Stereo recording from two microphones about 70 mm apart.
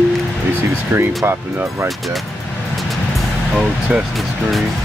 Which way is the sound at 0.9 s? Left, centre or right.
Right.